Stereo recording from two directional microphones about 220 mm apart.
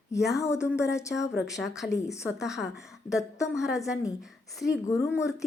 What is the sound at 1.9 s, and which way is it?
Speech, 15° left (ahead or behind).